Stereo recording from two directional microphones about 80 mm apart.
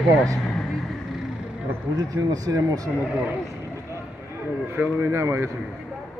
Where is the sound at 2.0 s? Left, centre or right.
Right.